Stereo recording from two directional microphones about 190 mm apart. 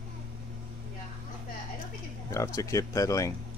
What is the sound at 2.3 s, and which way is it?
Speech, 15° left (ahead or behind).